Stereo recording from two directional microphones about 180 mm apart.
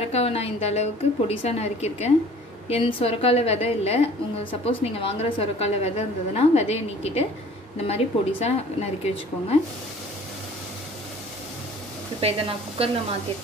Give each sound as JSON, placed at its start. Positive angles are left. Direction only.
{"t": 0.1, "sound": "a woman's voice", "side_deg": 35}
{"t": 12.2, "sound": "speech", "side_deg": -35}